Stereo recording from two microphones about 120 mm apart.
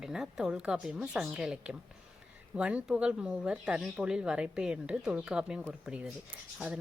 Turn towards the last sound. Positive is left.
turn(degrees=-10)  # may be behind; listen again after turning